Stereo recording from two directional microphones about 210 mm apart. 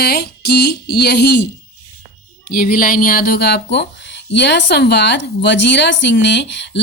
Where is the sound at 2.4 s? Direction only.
45° left (ahead or behind).